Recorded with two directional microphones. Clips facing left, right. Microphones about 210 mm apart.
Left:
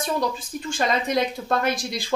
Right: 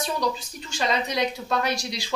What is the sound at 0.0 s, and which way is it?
A woman's voice, 50° left (ahead or behind).